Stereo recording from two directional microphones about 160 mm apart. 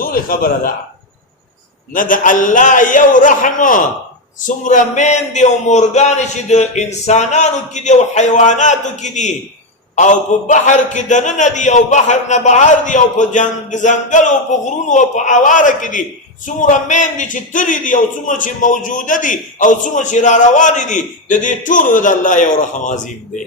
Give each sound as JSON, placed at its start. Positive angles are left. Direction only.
{"t": 0.0, "sound": "a man's voice", "side_deg": 65}
{"t": 1.9, "sound": "a man's voice", "side_deg": 55}